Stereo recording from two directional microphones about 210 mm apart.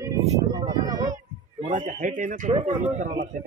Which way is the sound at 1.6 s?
35° right (ahead or behind).